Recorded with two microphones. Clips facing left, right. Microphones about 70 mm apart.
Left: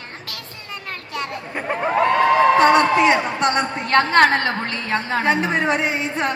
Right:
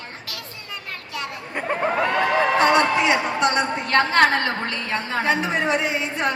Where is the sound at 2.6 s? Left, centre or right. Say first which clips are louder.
Left 4 dB; left.